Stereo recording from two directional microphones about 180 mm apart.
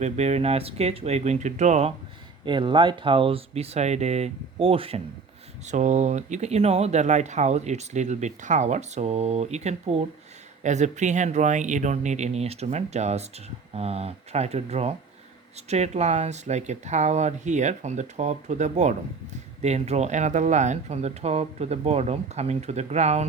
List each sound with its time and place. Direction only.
0.0 s speech: 40° right (ahead or behind)
2.4 s speech: 25° right (ahead or behind)
5.6 s speech: 40° right (ahead or behind)